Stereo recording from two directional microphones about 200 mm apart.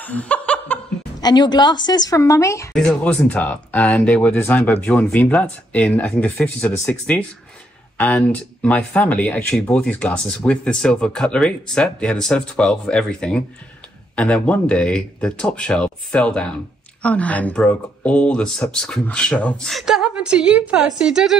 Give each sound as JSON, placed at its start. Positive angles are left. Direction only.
{"t": 0.0, "sound": "laughter", "side_deg": 5}
{"t": 1.2, "sound": "a woman's voice", "side_deg": 20}
{"t": 2.7, "sound": "speech", "side_deg": 5}